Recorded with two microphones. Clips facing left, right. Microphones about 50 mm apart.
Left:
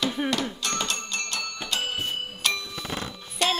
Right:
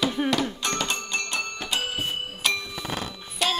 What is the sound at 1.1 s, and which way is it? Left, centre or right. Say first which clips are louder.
Music: right 3 dB; right.